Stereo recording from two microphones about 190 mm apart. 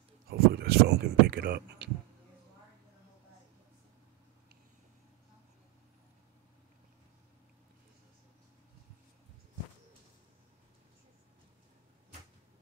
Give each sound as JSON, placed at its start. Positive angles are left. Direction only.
{"t": 0.3, "sound": "speech", "side_deg": -55}